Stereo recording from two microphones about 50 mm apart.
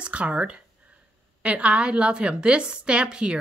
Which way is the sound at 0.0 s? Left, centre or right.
Right.